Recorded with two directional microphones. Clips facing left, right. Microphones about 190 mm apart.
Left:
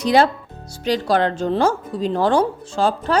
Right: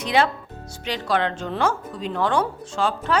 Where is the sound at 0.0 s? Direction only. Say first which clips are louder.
Left 5 dB; 40° left (ahead or behind).